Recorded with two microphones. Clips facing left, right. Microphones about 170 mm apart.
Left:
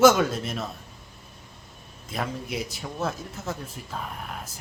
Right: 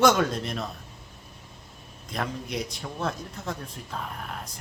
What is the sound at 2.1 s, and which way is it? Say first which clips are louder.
A man's voice: left 1 dB; 5° left (ahead or behind).